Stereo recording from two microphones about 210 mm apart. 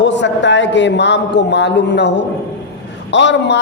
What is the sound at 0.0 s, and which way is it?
A man's voice, 60° left (ahead or behind).